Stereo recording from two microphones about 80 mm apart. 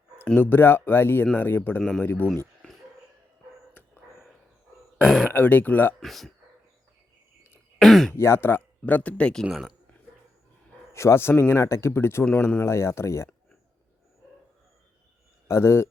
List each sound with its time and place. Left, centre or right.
0.3 s speech: left
5.0 s speech: centre
5.3 s speech: left
6.0 s speech: centre
7.8 s a sound: centre
8.1 s speech: left; by 9.5 s centre
9.5 s speech: centre
10.9 s speech: left
15.4 s speech: left